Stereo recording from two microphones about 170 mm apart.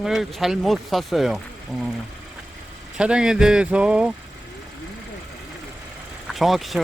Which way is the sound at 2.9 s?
5° right (ahead or behind).